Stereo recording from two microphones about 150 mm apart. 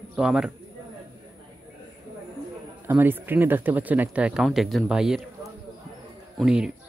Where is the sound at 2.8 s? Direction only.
15° right (ahead or behind).